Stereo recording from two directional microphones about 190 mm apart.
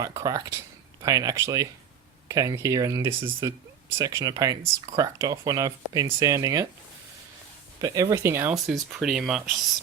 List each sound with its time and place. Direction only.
0.0 s speech: 20° right (ahead or behind)
7.8 s speech: 15° right (ahead or behind)
8.5 s speech: centre (ahead or behind)